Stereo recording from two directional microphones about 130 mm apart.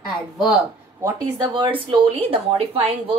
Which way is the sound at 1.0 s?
30° right (ahead or behind).